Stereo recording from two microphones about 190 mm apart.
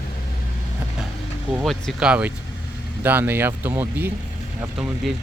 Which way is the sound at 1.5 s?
Centre (ahead or behind).